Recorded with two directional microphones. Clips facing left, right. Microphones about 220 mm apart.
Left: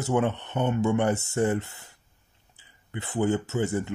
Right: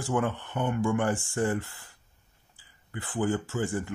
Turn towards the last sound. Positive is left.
turn(degrees=20)  # may be behind; listen again after turning